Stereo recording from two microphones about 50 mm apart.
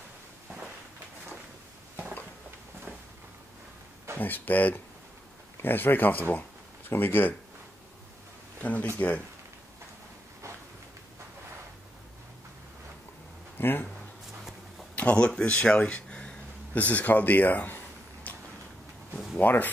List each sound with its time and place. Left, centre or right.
4.2 s speech: left
8.9 s speech: left
13.6 s speech: left
15.0 s speech: left
15.9 s a sound: centre
16.7 s speech: left
18.3 s a sound: left
19.3 s speech: left